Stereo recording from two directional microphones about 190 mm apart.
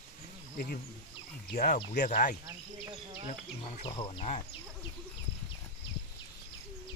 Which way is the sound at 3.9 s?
30° left (ahead or behind).